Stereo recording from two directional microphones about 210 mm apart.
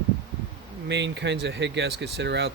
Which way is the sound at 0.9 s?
55° right (ahead or behind).